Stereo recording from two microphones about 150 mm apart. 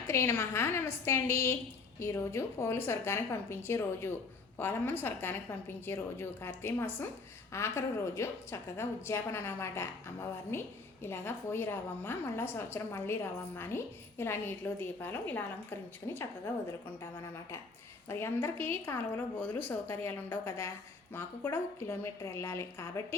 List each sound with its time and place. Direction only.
0.1 s a woman's voice: 15° left (ahead or behind)
18.1 s a woman's voice: 15° left (ahead or behind)